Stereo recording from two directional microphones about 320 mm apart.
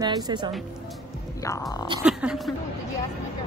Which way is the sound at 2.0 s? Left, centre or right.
Centre.